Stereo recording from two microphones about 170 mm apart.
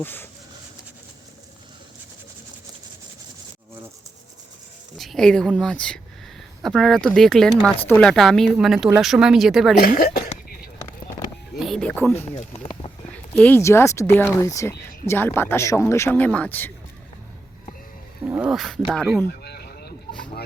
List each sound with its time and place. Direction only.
0.0 s speech: 10° left (ahead or behind)
4.9 s speech: centre (ahead or behind)
9.8 s a woman's voice: 60° left (ahead or behind)
11.5 s speech: centre (ahead or behind)
13.3 s speech: 10° left (ahead or behind)
18.3 s speech: 5° right (ahead or behind)
19.3 s a sound: 70° left (ahead or behind)